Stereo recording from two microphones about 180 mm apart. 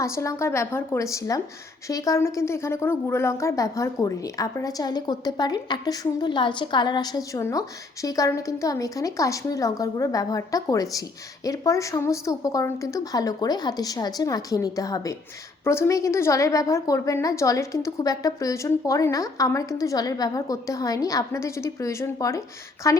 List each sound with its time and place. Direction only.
0.0 s a woman's voice: 15° left (ahead or behind)